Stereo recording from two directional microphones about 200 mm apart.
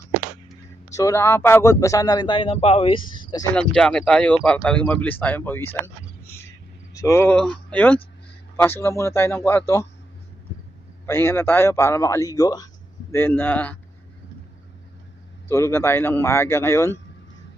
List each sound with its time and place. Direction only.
0.9 s speech: 15° left (ahead or behind)
3.5 s a man's voice: 5° left (ahead or behind)
11.0 s a man's voice: 10° left (ahead or behind)
15.4 s a man's voice: 15° left (ahead or behind)